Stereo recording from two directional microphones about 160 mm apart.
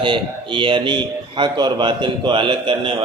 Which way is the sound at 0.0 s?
30° right (ahead or behind).